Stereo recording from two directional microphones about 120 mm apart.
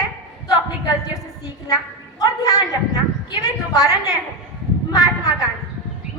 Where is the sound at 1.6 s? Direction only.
30° left (ahead or behind).